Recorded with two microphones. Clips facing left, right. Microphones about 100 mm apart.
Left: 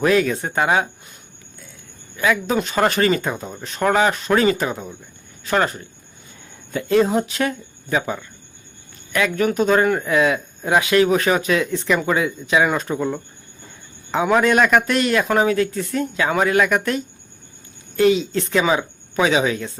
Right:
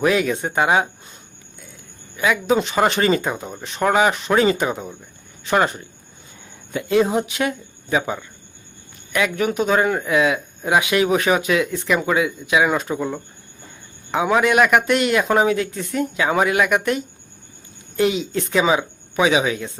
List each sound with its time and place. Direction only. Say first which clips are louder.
0.0 s speech: left 1 dB; 10° right (ahead or behind)
2.1 s speech: right 1 dB; 15° right (ahead or behind)